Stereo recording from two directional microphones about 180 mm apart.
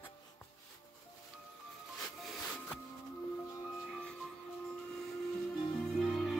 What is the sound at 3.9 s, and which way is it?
Music, 5° left (ahead or behind).